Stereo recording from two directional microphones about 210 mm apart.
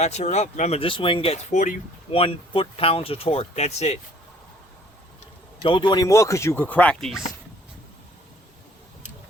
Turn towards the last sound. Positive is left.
turn(degrees=0)  # may be behind; listen again after turning